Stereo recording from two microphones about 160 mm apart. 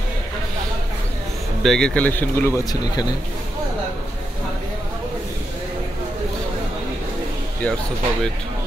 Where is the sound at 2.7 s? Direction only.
25° left (ahead or behind).